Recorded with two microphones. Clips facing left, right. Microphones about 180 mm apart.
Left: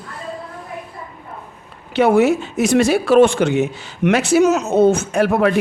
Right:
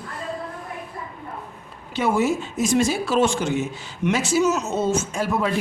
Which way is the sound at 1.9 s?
65° left (ahead or behind).